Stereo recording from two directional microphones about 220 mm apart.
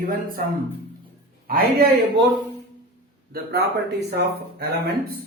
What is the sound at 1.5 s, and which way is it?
Speech, 45° right (ahead or behind).